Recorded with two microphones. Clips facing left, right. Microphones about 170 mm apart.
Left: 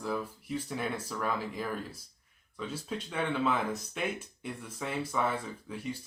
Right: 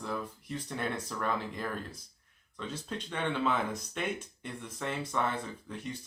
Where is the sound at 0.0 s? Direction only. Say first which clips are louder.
Left 2 dB; 5° left (ahead or behind).